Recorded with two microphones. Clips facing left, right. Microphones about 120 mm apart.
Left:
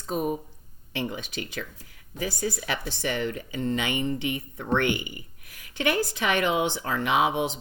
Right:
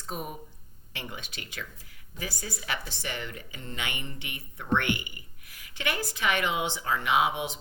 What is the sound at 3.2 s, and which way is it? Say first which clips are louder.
Speech: left 12 dB; 40° left (ahead or behind).